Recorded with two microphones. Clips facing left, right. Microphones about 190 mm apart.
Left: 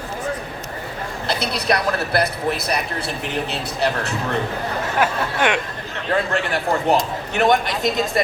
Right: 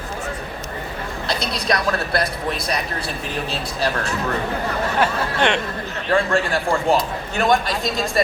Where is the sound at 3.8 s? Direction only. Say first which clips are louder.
Left 1 dB; 25° left (ahead or behind).